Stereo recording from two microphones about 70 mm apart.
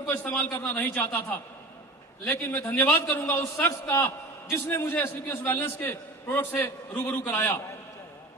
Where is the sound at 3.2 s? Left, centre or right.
Left.